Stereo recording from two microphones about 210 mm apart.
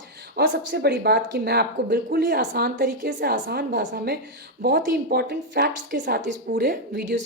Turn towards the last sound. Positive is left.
turn(degrees=-50)  # may be behind; listen again after turning